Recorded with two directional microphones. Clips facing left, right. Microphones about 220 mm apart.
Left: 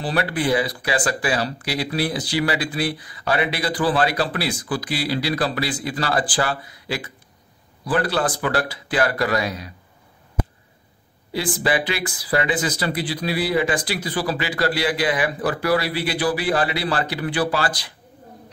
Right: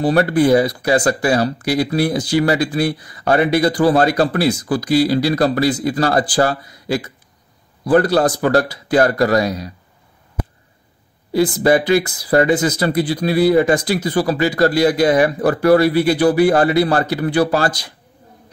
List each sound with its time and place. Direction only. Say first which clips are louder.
0.0 s a man's voice: right 9 dB; 45° right (ahead or behind)
11.3 s speech: right 8 dB; 45° right (ahead or behind)